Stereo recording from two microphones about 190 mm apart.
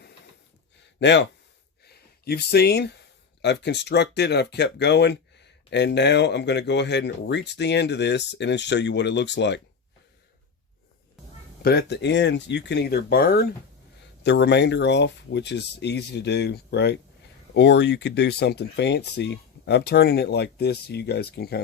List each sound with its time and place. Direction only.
0.9 s speech: 65° left (ahead or behind)
1.8 s a sound: 60° left (ahead or behind)
3.4 s speech: 65° left (ahead or behind)
11.6 s speech: 60° left (ahead or behind)
14.3 s speech: 65° left (ahead or behind)